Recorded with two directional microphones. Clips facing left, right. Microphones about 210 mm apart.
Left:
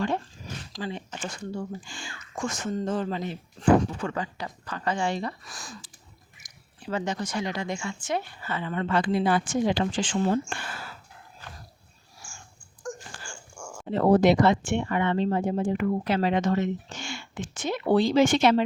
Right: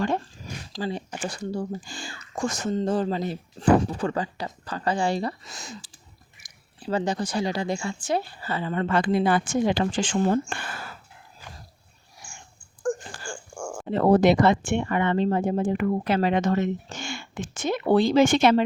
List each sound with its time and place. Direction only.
0.7 s speech: 35° right (ahead or behind)
5.5 s speech: 20° right (ahead or behind); by 10.9 s 50° right (ahead or behind)
12.8 s speech: 55° right (ahead or behind)